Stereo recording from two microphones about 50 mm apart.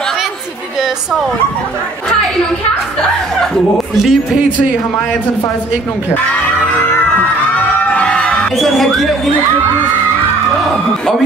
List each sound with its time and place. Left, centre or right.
3.9 s speech: centre
8.0 s music: left
8.5 s speech: centre